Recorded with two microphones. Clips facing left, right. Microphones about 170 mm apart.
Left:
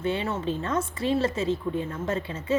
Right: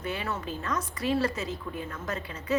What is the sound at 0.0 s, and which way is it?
A woman's voice, 25° left (ahead or behind).